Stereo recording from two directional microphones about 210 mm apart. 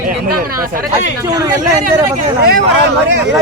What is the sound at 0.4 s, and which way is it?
Speech, 40° right (ahead or behind).